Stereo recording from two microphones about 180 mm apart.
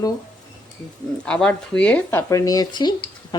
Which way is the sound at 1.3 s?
5° left (ahead or behind).